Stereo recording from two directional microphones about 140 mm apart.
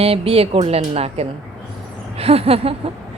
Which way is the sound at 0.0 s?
45° right (ahead or behind).